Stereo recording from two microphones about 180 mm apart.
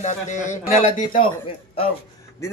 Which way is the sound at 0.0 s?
40° left (ahead or behind).